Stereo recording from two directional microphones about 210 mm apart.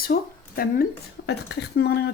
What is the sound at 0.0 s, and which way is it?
Speech, 45° left (ahead or behind).